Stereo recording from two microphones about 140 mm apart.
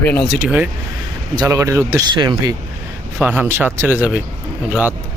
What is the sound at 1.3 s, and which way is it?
Speech, 25° right (ahead or behind).